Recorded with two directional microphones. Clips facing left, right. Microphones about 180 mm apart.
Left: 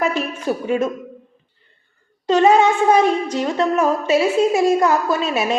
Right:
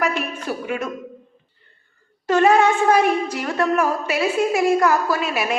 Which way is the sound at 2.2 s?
20° left (ahead or behind).